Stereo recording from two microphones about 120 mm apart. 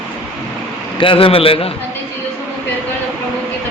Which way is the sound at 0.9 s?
45° left (ahead or behind).